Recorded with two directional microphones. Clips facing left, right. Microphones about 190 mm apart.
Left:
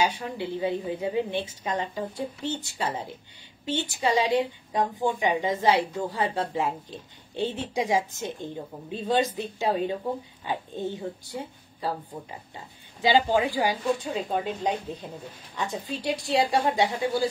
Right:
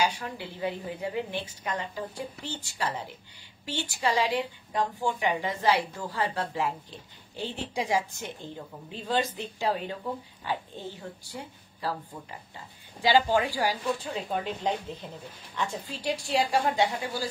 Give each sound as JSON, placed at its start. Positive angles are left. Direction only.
{"t": 0.2, "sound": "a woman's voice", "side_deg": 20}